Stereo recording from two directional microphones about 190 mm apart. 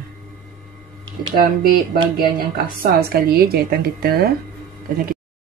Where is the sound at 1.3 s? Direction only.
50° right (ahead or behind).